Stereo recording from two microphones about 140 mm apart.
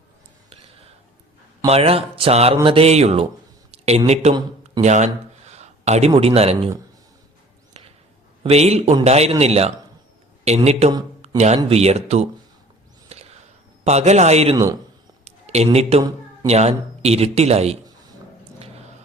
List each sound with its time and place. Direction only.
1.6 s speech: 45° right (ahead or behind)
4.8 s a sound: 55° right (ahead or behind)
6.1 s speech: 45° right (ahead or behind)
8.4 s speech: 50° right (ahead or behind)
13.1 s a sound: 50° right (ahead or behind)
13.8 s speech: 50° right (ahead or behind)
14.5 s speech: 25° right (ahead or behind)
15.2 s a sound: 50° right (ahead or behind)
16.5 s speech: 50° right (ahead or behind)